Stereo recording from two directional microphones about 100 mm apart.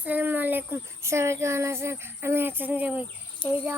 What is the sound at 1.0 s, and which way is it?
Speech, 30° right (ahead or behind).